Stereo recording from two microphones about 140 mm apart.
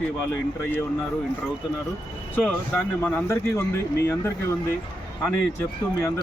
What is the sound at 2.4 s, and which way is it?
Speech, 15° left (ahead or behind).